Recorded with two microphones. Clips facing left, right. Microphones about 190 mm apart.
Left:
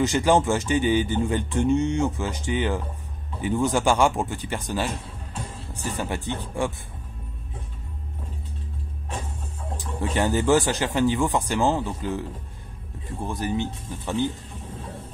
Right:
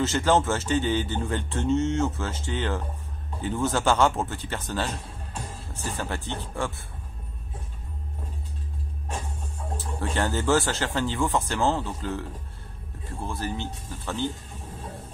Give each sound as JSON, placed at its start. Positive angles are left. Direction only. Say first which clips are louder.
{"t": 0.0, "sound": "speech", "louder": "left 2 dB", "side_deg": 15}
{"t": 9.8, "sound": "speech", "louder": "left 3 dB", "side_deg": 15}